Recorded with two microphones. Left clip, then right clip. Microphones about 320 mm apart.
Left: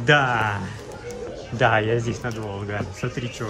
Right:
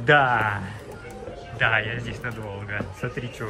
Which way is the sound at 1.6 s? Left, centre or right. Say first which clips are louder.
Left 3 dB; centre.